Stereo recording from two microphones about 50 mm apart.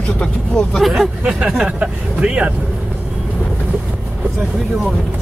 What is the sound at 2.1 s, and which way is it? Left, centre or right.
Vehicle, right.